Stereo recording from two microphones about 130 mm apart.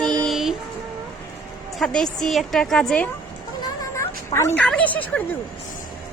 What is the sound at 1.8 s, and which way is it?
A woman's voice, 5° left (ahead or behind).